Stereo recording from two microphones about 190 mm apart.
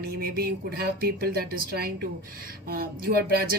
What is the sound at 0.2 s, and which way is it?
Speech, 50° right (ahead or behind).